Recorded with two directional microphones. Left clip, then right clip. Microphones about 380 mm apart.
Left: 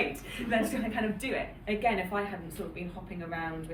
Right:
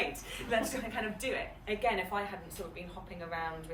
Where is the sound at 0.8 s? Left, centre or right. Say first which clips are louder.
Left 4 dB; centre.